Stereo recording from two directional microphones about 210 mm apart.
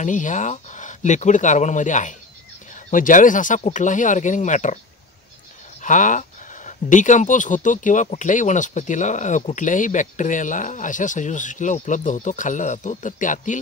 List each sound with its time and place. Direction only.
0.0 s speech: 35° left (ahead or behind)
5.8 s speech: 35° left (ahead or behind)